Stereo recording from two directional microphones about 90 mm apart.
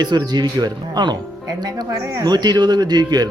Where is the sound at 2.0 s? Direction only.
35° right (ahead or behind).